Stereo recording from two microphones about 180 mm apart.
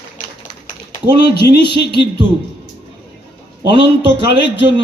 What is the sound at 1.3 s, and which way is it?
Speech, 65° left (ahead or behind).